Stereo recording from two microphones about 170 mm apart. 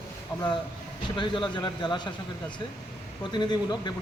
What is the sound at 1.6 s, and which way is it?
Speech, 25° left (ahead or behind).